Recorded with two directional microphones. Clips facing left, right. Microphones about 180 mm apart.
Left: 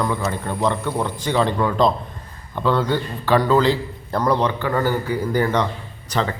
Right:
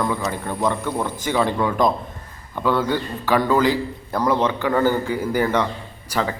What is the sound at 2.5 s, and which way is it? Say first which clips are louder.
A man's voice: left 1 dB; 10° right (ahead or behind).